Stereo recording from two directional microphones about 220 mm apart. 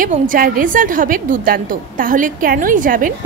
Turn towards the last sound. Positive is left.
turn(degrees=-40)  # may be behind; listen again after turning